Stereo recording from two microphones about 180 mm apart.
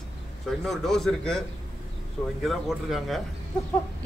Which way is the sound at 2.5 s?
Centre (ahead or behind).